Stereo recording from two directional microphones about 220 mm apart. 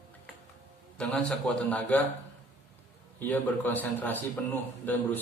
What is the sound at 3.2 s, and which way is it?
A man's voice, 10° left (ahead or behind).